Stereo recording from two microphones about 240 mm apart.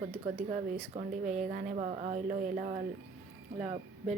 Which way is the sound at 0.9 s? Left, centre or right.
Right.